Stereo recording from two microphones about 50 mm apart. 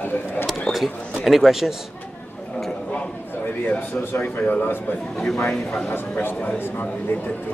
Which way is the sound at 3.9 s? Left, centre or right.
Left.